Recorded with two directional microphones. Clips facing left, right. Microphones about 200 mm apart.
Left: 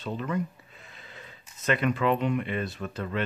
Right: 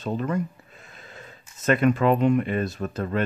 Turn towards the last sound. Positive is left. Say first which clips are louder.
# right 5 dB
turn(degrees=-45)  # may be behind; listen again after turning